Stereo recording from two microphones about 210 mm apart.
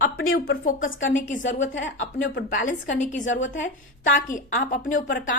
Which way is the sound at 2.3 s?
40° left (ahead or behind).